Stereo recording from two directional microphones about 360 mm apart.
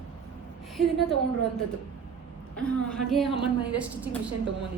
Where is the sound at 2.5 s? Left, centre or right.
Centre.